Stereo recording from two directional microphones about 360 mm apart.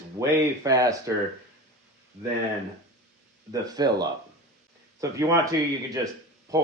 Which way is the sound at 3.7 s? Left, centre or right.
Centre.